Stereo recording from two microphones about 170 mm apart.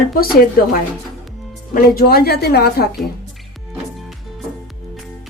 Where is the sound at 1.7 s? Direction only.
65° left (ahead or behind).